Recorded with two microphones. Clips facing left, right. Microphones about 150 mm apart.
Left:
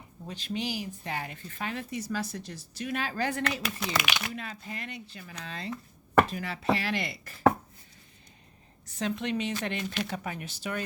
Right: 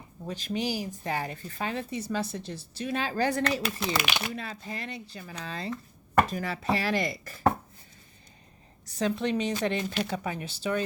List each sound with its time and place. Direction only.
0.3 s speech: 45° right (ahead or behind)
8.9 s speech: 35° right (ahead or behind)